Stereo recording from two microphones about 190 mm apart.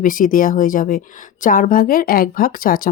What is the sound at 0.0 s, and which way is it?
Speech, 45° left (ahead or behind).